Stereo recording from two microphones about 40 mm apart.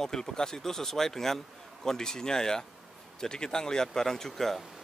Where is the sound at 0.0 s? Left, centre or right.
Centre.